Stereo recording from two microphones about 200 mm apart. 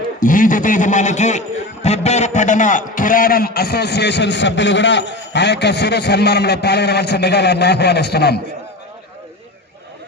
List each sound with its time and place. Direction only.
0.2 s a man's voice: 40° left (ahead or behind)